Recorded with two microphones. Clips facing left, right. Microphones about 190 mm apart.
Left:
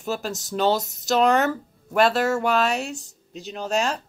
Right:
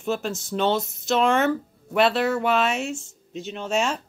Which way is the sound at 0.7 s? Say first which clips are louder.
Left 2 dB; 40° left (ahead or behind).